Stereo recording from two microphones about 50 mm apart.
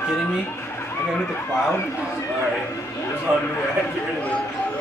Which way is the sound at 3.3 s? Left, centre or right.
Right.